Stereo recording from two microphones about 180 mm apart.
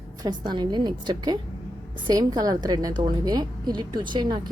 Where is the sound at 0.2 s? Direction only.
25° right (ahead or behind).